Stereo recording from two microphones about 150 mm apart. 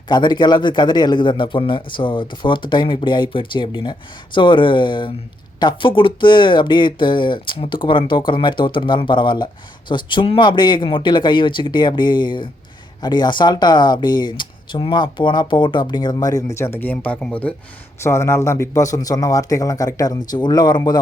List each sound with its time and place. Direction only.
0.1 s a man's voice: 30° left (ahead or behind); by 17.5 s 5° left (ahead or behind)
18.0 s speech: 20° left (ahead or behind)